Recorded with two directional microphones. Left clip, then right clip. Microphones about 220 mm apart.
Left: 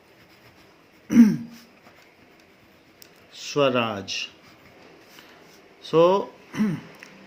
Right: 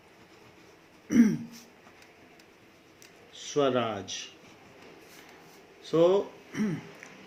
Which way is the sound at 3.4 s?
40° left (ahead or behind).